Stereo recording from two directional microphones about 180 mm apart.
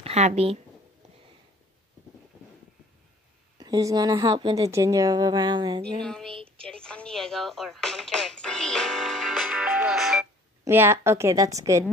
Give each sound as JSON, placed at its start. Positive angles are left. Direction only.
{"t": 0.0, "sound": "speech", "side_deg": -35}
{"t": 3.5, "sound": "a woman's voice", "side_deg": -20}
{"t": 5.9, "sound": "a sound", "side_deg": 5}
{"t": 6.3, "sound": "a woman's voice", "side_deg": -30}
{"t": 6.7, "sound": "music", "side_deg": 5}
{"t": 10.6, "sound": "a woman's voice", "side_deg": -15}